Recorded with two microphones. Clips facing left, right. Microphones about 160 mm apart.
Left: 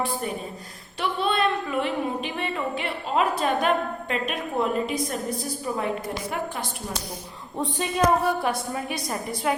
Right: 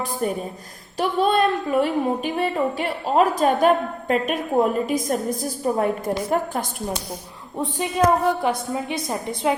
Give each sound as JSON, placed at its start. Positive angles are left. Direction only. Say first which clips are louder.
{"t": 0.0, "sound": "a woman's voice", "louder": "right 3 dB", "side_deg": -45}
{"t": 7.8, "sound": "a woman's voice", "louder": "right 3 dB", "side_deg": -15}